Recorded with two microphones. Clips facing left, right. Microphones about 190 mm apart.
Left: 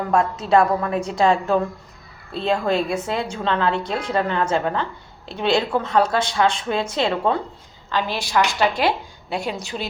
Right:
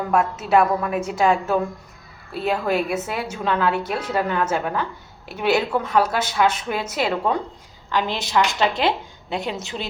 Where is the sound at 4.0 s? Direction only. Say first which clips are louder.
Left 1 dB; 10° right (ahead or behind).